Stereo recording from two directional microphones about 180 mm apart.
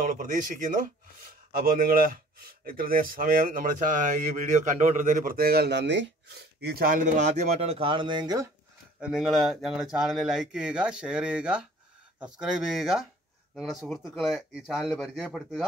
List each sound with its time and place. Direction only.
0.0 s speech: 50° right (ahead or behind); by 8.5 s 20° right (ahead or behind)
9.0 s speech: 5° right (ahead or behind)